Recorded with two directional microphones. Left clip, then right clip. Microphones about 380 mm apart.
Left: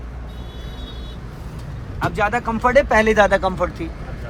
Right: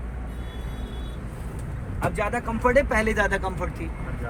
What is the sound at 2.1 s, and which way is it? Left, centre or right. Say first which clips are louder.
Speech: left 7 dB; left.